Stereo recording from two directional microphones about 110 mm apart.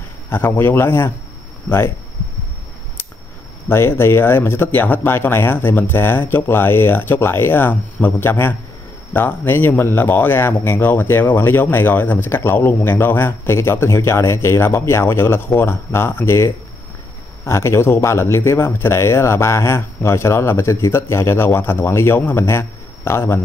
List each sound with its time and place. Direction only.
0.3 s speech: 20° left (ahead or behind)
3.6 s speech: 20° left (ahead or behind)